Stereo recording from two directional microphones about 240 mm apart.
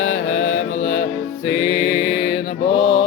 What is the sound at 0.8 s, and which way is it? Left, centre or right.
Music, left.